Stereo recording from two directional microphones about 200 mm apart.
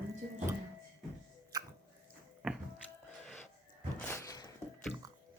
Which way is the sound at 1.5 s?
20° right (ahead or behind).